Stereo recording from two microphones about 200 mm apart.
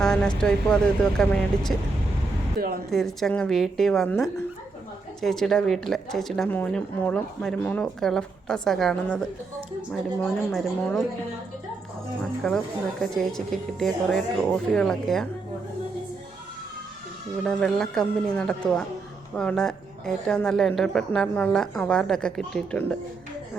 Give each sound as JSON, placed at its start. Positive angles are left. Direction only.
{"t": 0.0, "sound": "vehicle", "side_deg": 5}
{"t": 0.3, "sound": "speech", "side_deg": 5}
{"t": 2.6, "sound": "speech", "side_deg": -50}
{"t": 2.9, "sound": "speech", "side_deg": 0}
{"t": 10.5, "sound": "speech", "side_deg": 0}
{"t": 12.4, "sound": "speech", "side_deg": 5}
{"t": 17.4, "sound": "speech", "side_deg": 5}